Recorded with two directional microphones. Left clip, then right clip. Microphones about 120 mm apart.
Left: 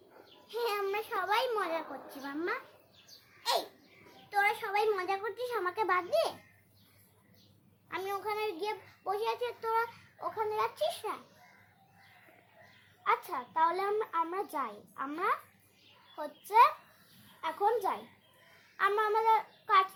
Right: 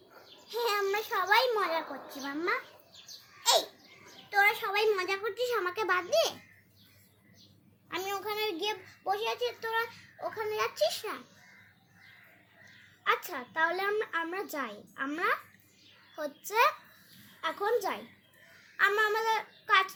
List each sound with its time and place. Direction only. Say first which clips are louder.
0.4 s a sound: right 3 dB; 15° left (ahead or behind)
1.3 s a child's voice: right 5 dB; 10° left (ahead or behind)
4.3 s a child's voice: right 3 dB; 10° left (ahead or behind); by 6.3 s 30° left (ahead or behind)
7.9 s a child's voice: right 1 dB; 50° left (ahead or behind)
10.2 s speech: even; 30° left (ahead or behind)
13.1 s speech: right 1 dB; 35° left (ahead or behind)
18.8 s a sound: right 2 dB; 40° left (ahead or behind)